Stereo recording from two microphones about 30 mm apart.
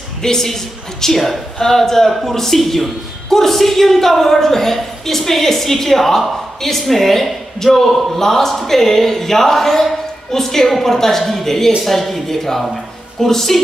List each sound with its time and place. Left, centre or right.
0.2 s a man's voice: centre
1.0 s a man's voice: centre